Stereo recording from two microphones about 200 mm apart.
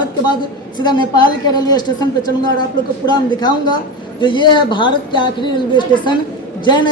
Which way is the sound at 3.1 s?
20° left (ahead or behind).